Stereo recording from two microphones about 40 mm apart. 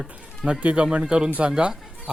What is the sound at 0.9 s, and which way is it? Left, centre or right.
Speech, right.